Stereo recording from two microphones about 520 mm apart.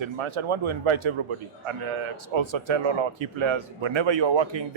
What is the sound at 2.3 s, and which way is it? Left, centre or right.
Speech, right.